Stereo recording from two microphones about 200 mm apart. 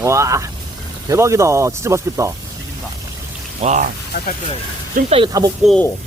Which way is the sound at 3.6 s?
35° right (ahead or behind).